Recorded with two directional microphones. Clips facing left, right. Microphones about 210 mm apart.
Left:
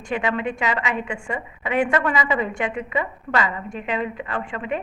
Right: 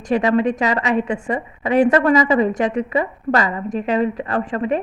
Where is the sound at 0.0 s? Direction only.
40° right (ahead or behind).